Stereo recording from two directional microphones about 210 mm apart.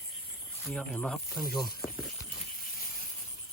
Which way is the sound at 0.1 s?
Centre (ahead or behind).